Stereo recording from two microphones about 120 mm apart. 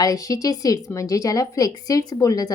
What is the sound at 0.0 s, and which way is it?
A woman's voice, 30° left (ahead or behind).